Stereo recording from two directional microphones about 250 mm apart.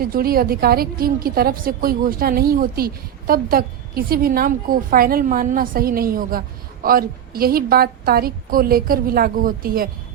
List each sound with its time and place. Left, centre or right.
0.0 s a woman's voice: right